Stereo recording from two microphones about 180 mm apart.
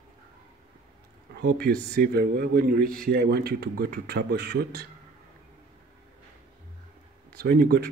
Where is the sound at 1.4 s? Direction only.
60° right (ahead or behind).